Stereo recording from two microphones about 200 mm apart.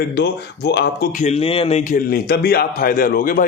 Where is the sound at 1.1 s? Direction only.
35° left (ahead or behind).